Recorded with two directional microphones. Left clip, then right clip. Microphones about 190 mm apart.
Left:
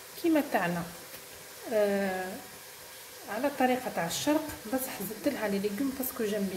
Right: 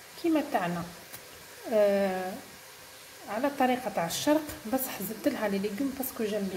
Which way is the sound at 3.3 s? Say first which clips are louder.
Right 1 dB; 15° right (ahead or behind).